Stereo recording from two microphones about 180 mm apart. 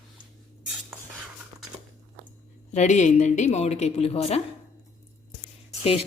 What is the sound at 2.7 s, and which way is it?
A woman's voice, 40° left (ahead or behind).